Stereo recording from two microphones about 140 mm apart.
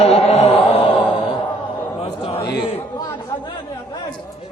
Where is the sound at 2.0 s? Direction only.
45° left (ahead or behind).